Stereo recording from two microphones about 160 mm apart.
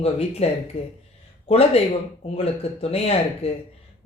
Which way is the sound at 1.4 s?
40° left (ahead or behind).